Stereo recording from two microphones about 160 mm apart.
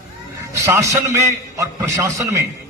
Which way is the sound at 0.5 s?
20° right (ahead or behind).